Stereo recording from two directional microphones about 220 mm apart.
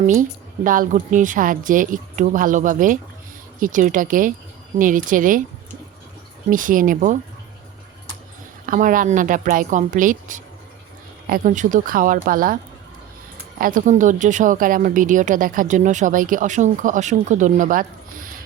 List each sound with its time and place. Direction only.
0.0 s speech: 35° right (ahead or behind)
6.5 s speech: 40° right (ahead or behind)
8.6 s speech: 35° right (ahead or behind)
13.6 s speech: 40° right (ahead or behind)